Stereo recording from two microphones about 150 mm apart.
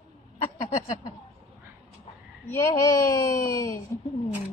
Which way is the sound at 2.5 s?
20° left (ahead or behind).